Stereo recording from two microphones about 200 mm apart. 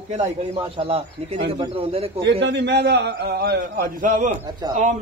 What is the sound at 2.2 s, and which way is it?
A man's voice, 60° right (ahead or behind).